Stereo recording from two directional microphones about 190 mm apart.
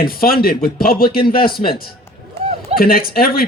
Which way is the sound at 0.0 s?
50° left (ahead or behind).